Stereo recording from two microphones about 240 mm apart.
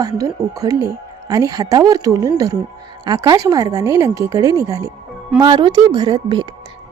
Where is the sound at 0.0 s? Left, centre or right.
Centre.